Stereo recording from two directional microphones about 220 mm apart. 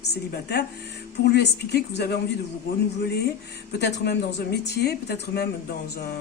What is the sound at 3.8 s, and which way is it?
A woman's voice, 50° left (ahead or behind).